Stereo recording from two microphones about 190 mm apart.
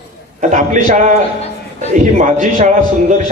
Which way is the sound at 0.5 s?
40° right (ahead or behind).